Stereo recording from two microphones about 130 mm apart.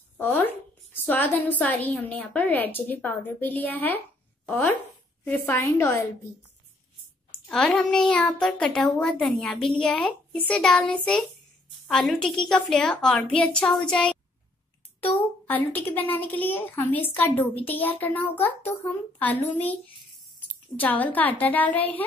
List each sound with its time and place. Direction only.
0.2 s a woman's voice: 15° left (ahead or behind)
5.2 s a woman's voice: 15° left (ahead or behind)
7.2 s a woman's voice: 5° left (ahead or behind)
15.4 s a woman's voice: 15° left (ahead or behind)
20.8 s a woman's voice: 15° left (ahead or behind)